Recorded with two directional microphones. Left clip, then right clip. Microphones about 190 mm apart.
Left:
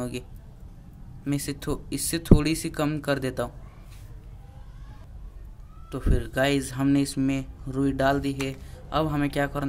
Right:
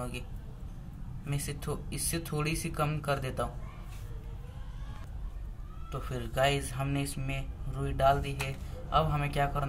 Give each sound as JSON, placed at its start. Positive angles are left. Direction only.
{"t": 1.2, "sound": "speech", "side_deg": 55}
{"t": 5.9, "sound": "speech", "side_deg": 50}